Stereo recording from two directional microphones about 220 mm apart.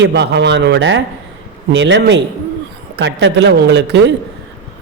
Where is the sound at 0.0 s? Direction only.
50° right (ahead or behind).